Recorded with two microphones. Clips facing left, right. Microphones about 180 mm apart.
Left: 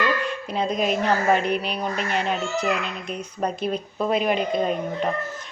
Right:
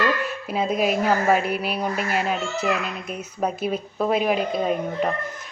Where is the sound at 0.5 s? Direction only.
5° right (ahead or behind).